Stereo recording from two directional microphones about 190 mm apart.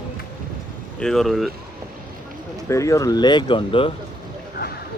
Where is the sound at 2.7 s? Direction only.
15° left (ahead or behind).